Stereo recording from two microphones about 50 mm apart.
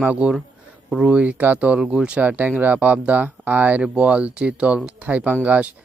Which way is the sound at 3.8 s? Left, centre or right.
Right.